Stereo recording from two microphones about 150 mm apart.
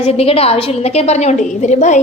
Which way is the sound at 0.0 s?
40° left (ahead or behind).